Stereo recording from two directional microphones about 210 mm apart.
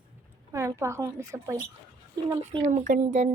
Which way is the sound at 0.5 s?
15° right (ahead or behind).